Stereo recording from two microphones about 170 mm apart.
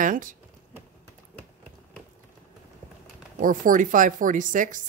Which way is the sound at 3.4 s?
55° right (ahead or behind).